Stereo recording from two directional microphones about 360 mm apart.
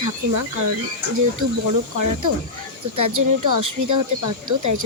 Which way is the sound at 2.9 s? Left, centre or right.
Right.